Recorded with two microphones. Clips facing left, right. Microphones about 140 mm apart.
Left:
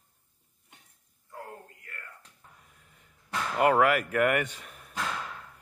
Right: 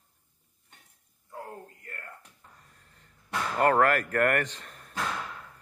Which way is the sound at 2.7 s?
5° left (ahead or behind).